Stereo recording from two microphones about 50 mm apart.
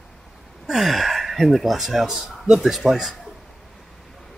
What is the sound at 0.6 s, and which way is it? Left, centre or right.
Speech, centre.